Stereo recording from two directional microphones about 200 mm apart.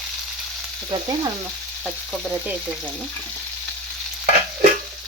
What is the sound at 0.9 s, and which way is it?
Frying, 20° right (ahead or behind).